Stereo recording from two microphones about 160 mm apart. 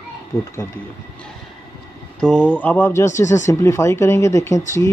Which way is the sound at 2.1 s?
5° left (ahead or behind).